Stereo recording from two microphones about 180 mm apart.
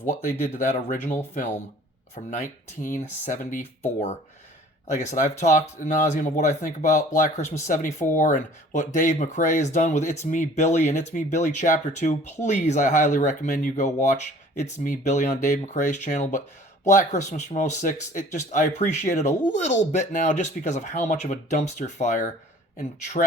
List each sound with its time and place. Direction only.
0.1 s speech: 45° left (ahead or behind)
4.9 s speech: 40° left (ahead or behind)